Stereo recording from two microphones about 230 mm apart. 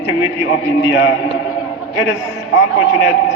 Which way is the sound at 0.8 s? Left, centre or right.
Left.